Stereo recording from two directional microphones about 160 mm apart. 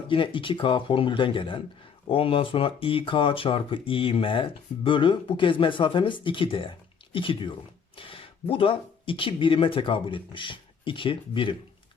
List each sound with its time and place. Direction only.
0.1 s speech: 30° left (ahead or behind)